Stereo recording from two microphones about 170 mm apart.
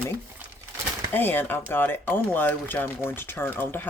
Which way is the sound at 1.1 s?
10° left (ahead or behind).